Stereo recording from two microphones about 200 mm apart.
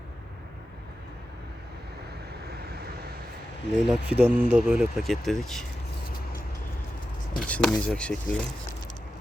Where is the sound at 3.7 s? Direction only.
5° right (ahead or behind).